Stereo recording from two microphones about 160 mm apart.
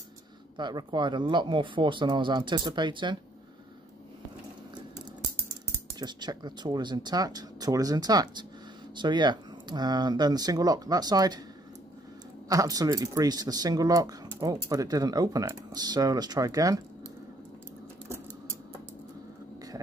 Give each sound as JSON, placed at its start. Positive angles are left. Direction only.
{"t": 0.6, "sound": "speech", "side_deg": -25}
{"t": 5.9, "sound": "speech", "side_deg": -25}
{"t": 12.4, "sound": "speech", "side_deg": -20}